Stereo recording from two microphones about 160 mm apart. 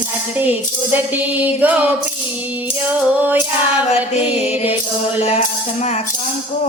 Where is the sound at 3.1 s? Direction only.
10° right (ahead or behind).